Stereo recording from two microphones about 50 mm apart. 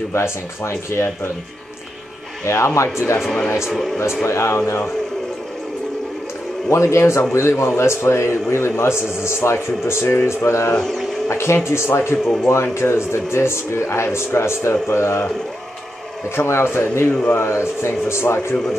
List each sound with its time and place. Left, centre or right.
0.1 s a man's voice: left
2.4 s a man's voice: left
3.7 s speech: centre
4.2 s a man's voice: left
6.7 s a man's voice: left
16.3 s a man's voice: left
17.3 s a man's voice: left